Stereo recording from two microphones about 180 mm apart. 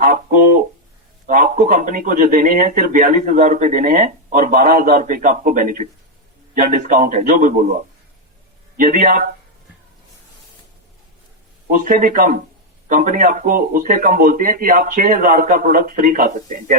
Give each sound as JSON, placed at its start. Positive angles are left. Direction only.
{"t": 0.0, "sound": "speech", "side_deg": -50}
{"t": 8.8, "sound": "speech", "side_deg": -45}
{"t": 11.7, "sound": "speech", "side_deg": -50}